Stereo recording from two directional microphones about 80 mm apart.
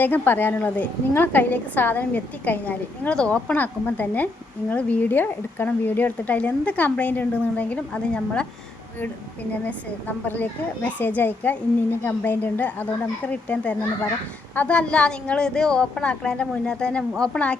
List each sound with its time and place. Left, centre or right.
0.0 s a woman's voice: left
10.2 s a woman's voice: left